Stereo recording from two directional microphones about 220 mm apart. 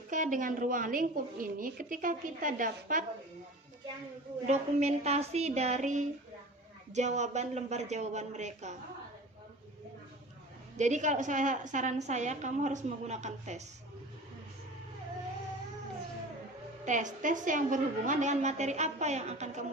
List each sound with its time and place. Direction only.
0.1 s a woman's voice: 35° right (ahead or behind)
4.4 s a woman's voice: 30° right (ahead or behind)
10.8 s a woman's voice: 35° right (ahead or behind)
16.8 s a woman's voice: 35° right (ahead or behind)